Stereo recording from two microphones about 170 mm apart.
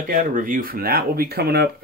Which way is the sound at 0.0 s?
50° right (ahead or behind).